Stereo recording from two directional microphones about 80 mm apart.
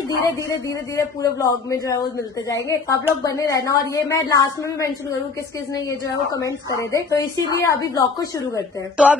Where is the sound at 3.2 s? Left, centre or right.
Left.